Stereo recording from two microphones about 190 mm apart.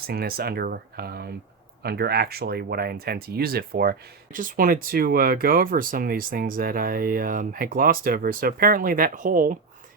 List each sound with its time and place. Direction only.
0.1 s speech: 50° right (ahead or behind)